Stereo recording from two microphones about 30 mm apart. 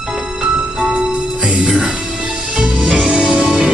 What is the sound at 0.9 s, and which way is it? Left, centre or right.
Music, right.